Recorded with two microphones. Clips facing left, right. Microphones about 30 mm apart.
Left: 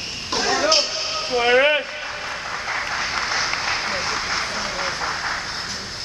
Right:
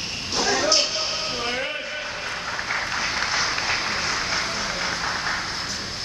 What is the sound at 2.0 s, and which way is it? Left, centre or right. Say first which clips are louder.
Vehicle: left 1 dB; centre.